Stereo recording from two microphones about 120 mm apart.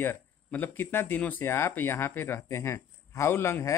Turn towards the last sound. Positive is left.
turn(degrees=20)  # may be behind; listen again after turning